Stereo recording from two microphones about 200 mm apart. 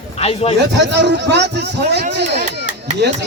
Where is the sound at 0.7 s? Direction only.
60° right (ahead or behind).